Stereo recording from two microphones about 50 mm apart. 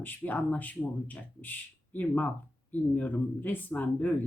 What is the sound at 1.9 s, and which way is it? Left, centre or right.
A man's voice, left.